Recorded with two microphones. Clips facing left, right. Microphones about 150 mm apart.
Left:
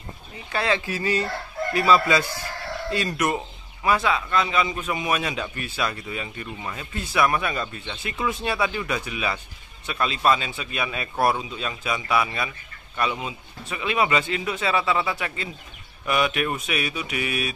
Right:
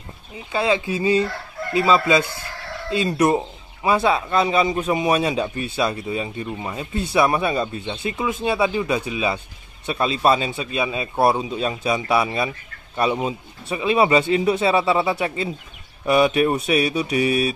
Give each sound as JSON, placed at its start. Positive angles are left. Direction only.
{"t": 0.5, "sound": "speech", "side_deg": -15}
{"t": 1.9, "sound": "a man's voice", "side_deg": -20}